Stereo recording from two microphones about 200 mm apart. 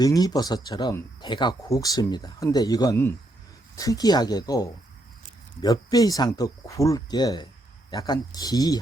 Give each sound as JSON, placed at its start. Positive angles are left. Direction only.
{"t": 0.0, "sound": "speech", "side_deg": 20}
{"t": 5.6, "sound": "speech", "side_deg": 20}